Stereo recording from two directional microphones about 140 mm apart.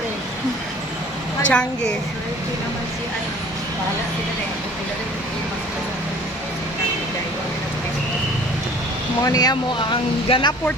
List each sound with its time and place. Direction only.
1.5 s a woman's voice: 5° left (ahead or behind)
9.2 s speech: 25° left (ahead or behind)
10.2 s speech: 40° left (ahead or behind)